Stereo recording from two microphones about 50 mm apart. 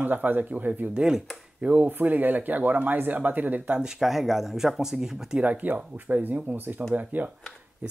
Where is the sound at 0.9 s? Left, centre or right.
Centre.